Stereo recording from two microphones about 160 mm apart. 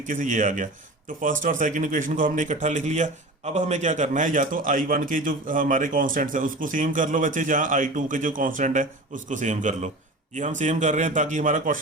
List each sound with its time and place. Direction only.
0.0 s speech: 50° right (ahead or behind)